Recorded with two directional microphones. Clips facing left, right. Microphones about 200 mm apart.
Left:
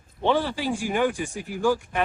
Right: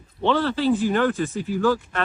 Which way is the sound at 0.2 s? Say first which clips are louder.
Right 2 dB; 15° left (ahead or behind).